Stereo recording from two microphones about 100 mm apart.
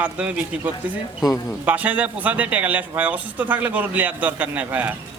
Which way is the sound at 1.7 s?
15° right (ahead or behind).